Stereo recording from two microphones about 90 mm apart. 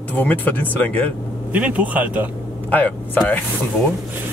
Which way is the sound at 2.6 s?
15° left (ahead or behind).